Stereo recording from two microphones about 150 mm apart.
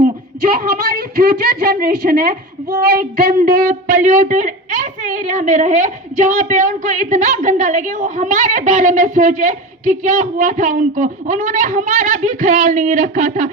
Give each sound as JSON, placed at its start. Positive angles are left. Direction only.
{"t": 0.4, "sound": "a woman's voice", "side_deg": -90}